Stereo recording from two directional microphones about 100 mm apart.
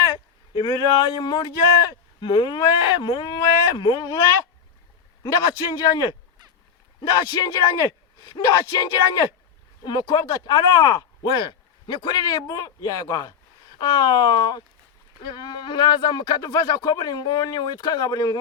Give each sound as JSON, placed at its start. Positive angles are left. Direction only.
{"t": 0.5, "sound": "speech", "side_deg": 45}
{"t": 5.2, "sound": "speech", "side_deg": 45}